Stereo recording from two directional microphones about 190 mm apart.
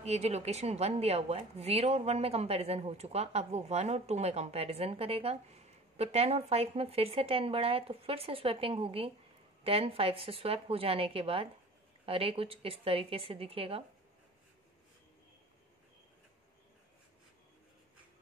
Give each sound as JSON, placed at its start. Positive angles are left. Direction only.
{"t": 0.0, "sound": "speech", "side_deg": -35}